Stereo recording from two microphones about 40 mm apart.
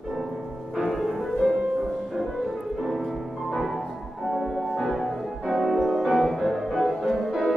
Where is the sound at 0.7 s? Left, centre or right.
Centre.